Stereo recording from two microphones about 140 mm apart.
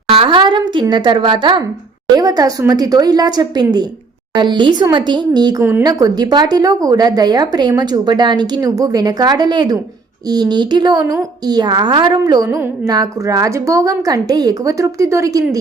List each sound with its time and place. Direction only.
0.1 s a woman's voice: 40° right (ahead or behind); by 15.4 s 25° right (ahead or behind)